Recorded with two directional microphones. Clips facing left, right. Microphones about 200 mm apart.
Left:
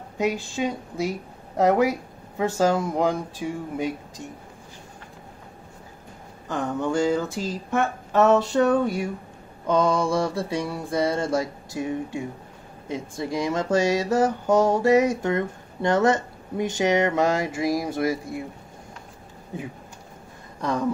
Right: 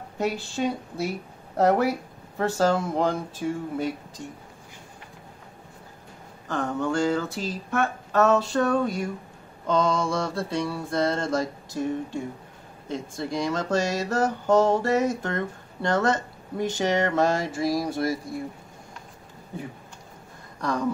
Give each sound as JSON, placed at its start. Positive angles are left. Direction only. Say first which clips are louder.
{"t": 0.6, "sound": "speech", "louder": "right 1 dB", "side_deg": 5}
{"t": 6.5, "sound": "speech", "louder": "left 1 dB", "side_deg": 20}